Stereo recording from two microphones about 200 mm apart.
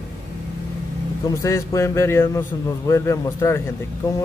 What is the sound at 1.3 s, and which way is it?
Speech, 15° left (ahead or behind).